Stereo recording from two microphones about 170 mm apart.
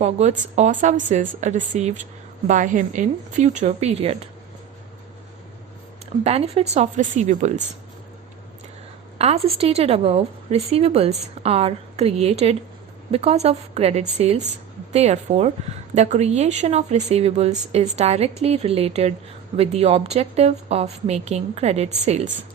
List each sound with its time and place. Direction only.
0.0 s a woman's voice: 40° right (ahead or behind)
6.2 s a woman's voice: 40° right (ahead or behind)
9.1 s a woman's voice: 35° right (ahead or behind)